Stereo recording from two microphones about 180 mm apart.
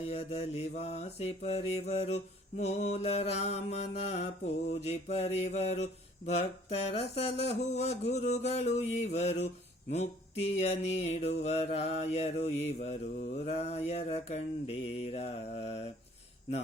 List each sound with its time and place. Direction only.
0.0 s mantra: 35° left (ahead or behind)